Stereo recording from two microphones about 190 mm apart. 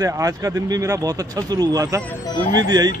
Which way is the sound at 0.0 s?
20° right (ahead or behind).